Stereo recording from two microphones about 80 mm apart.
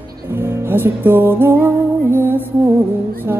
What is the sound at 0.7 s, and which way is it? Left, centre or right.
Music, right.